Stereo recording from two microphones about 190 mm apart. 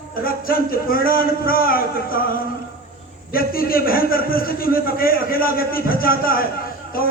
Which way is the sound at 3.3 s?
50° left (ahead or behind).